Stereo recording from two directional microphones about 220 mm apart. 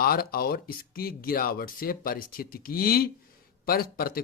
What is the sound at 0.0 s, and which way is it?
Speech, 40° left (ahead or behind).